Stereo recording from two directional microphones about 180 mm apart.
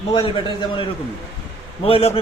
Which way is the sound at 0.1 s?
30° left (ahead or behind).